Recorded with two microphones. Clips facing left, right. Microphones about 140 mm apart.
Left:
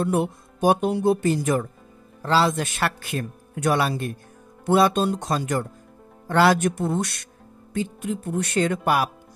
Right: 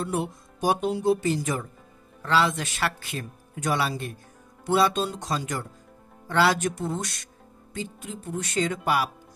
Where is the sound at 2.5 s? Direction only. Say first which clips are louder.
Left 4 dB; 50° left (ahead or behind).